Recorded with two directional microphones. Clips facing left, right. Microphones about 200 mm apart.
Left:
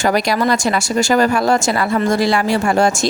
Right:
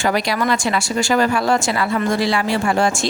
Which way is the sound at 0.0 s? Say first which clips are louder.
Left 3 dB; 40° left (ahead or behind).